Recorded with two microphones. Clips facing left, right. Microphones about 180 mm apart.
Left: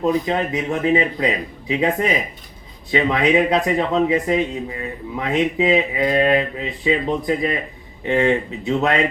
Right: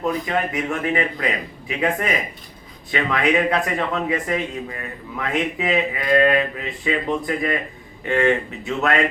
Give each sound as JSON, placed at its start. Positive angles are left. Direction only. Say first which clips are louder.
{"t": 0.0, "sound": "a man's voice", "louder": "left 3 dB", "side_deg": 25}